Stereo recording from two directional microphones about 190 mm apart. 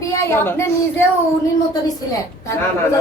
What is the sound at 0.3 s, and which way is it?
Speech, 10° left (ahead or behind).